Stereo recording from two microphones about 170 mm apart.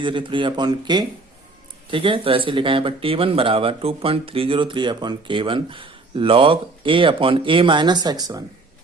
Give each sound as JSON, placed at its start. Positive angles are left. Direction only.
{"t": 0.0, "sound": "speech", "side_deg": -30}